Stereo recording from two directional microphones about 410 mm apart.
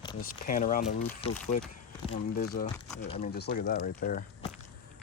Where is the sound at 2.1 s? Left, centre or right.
Left.